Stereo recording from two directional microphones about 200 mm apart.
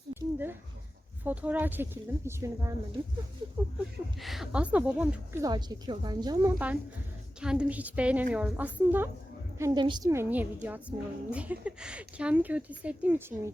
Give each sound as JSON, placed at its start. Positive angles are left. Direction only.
{"t": 0.1, "sound": "a sound", "side_deg": -10}
{"t": 1.2, "sound": "a woman's voice", "side_deg": -10}
{"t": 4.2, "sound": "a woman's voice", "side_deg": 0}
{"t": 7.4, "sound": "a woman's voice", "side_deg": -5}